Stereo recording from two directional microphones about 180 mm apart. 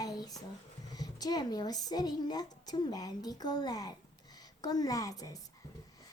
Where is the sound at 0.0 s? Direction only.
20° left (ahead or behind).